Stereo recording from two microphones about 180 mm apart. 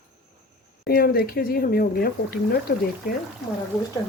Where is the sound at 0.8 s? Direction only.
60° left (ahead or behind).